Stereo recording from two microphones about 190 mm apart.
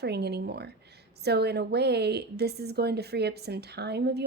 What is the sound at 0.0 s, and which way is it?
A woman's voice, 60° right (ahead or behind).